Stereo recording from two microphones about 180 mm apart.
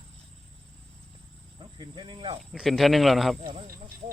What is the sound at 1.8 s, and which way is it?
Speech, 25° right (ahead or behind).